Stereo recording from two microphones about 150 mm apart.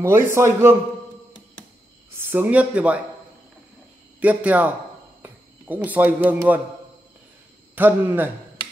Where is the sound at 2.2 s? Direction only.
15° right (ahead or behind).